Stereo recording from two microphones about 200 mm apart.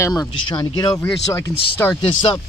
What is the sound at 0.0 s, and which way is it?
Speech, 20° left (ahead or behind).